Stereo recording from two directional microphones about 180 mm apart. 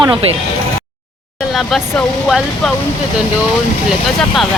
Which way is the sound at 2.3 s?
Centre (ahead or behind).